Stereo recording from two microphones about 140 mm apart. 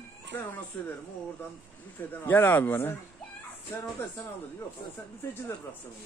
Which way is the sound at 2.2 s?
15° left (ahead or behind).